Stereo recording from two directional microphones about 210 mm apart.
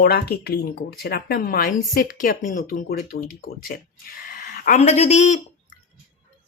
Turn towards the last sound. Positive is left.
turn(degrees=35)  # may be behind; listen again after turning